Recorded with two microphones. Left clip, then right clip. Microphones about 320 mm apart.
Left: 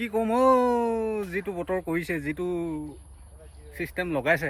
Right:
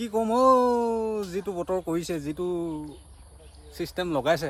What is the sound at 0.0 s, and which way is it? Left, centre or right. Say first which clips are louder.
Speech: right 1 dB; centre.